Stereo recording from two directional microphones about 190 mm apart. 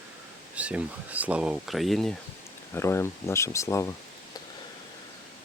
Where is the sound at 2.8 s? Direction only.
15° left (ahead or behind).